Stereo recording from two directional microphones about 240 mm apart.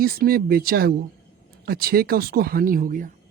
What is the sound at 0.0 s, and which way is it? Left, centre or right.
Speech, right.